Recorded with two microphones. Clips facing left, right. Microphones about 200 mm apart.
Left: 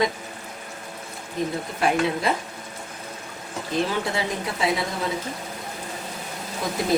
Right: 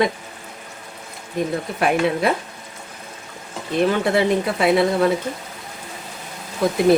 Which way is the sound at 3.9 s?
60° right (ahead or behind).